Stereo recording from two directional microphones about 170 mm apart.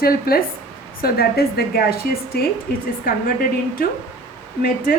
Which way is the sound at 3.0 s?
60° left (ahead or behind).